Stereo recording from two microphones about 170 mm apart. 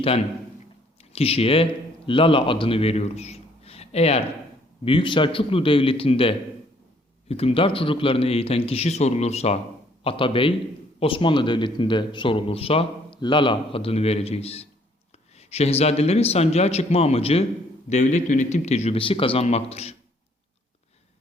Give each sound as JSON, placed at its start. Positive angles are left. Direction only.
{"t": 1.1, "sound": "a man's voice", "side_deg": 35}